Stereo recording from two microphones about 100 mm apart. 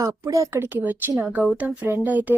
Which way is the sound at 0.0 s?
35° right (ahead or behind).